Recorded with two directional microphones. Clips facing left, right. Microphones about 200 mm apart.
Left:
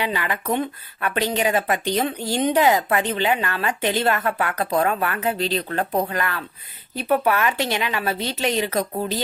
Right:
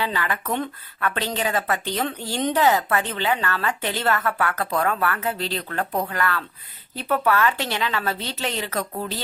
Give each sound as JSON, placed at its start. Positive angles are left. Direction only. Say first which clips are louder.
{"t": 0.0, "sound": "a woman's voice", "louder": "left 1 dB", "side_deg": 15}